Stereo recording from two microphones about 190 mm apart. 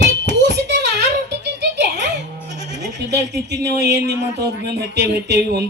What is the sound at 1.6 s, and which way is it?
Music, 65° right (ahead or behind).